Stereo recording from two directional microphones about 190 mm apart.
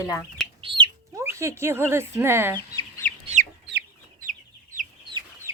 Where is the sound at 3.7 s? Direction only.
65° right (ahead or behind).